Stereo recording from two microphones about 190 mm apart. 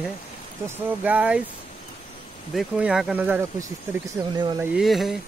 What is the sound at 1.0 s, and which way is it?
Speech, 5° right (ahead or behind).